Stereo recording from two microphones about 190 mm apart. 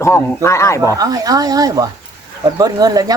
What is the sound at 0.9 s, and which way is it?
Speech, 20° right (ahead or behind).